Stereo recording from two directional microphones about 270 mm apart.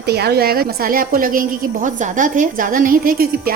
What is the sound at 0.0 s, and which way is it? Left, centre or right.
A woman's voice, right.